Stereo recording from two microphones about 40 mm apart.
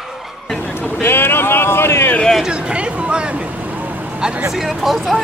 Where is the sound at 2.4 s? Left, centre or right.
Right.